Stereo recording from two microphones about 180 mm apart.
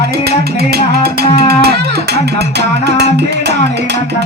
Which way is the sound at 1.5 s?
65° right (ahead or behind).